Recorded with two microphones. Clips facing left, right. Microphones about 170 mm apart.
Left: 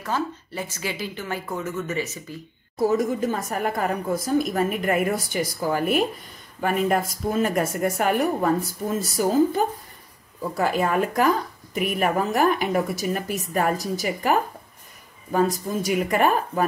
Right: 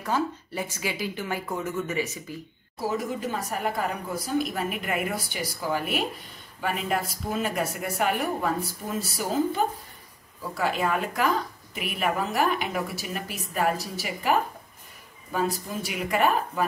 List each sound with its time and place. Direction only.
0.0 s speech: 10° right (ahead or behind)
3.2 s a woman's voice: 45° left (ahead or behind)
15.3 s a woman's voice: 45° left (ahead or behind)